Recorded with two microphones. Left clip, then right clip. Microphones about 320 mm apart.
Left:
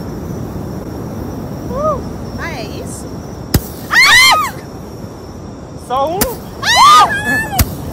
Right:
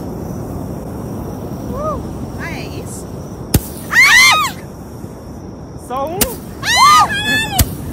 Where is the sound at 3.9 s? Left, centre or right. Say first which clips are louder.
Left 1 dB; centre.